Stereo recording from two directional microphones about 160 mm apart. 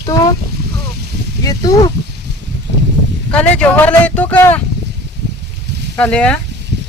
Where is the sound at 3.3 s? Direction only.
10° left (ahead or behind).